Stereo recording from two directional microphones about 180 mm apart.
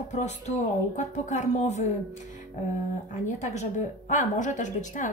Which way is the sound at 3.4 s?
40° left (ahead or behind).